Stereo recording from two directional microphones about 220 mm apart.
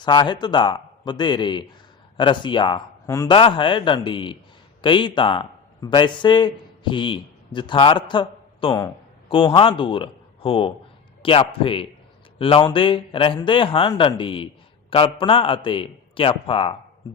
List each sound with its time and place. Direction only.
0.0 s speech: 20° left (ahead or behind)